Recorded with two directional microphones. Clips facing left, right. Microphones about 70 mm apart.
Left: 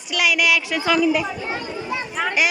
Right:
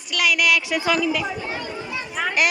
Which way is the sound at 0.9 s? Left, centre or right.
Centre.